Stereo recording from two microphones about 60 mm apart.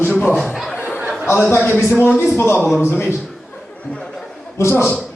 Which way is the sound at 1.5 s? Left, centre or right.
Left.